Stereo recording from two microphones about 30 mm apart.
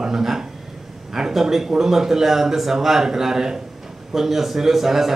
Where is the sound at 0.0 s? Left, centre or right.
Centre.